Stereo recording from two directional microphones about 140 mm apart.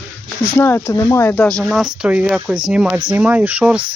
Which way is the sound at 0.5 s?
15° left (ahead or behind).